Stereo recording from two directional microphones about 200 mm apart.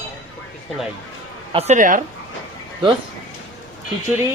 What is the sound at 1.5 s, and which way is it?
Speech, 35° right (ahead or behind).